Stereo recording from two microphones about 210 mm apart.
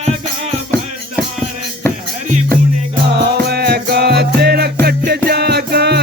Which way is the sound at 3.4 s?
50° right (ahead or behind).